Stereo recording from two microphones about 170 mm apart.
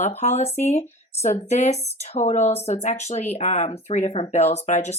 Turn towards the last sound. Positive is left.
turn(degrees=45)  # may be behind; listen again after turning